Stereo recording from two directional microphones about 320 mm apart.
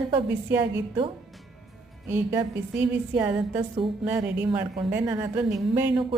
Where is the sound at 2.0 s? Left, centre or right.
Centre.